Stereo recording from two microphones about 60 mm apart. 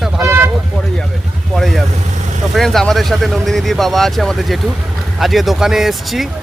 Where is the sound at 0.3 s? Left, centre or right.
Right.